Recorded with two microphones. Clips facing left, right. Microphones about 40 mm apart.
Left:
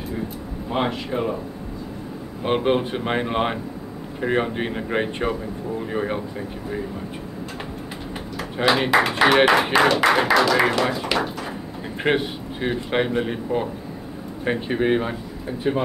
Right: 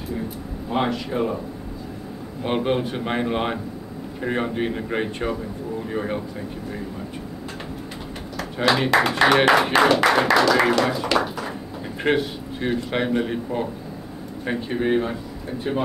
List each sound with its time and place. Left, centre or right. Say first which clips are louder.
0.7 s a man's voice: even; centre
2.4 s a man's voice: left 2 dB; centre
8.4 s a man's voice: even; centre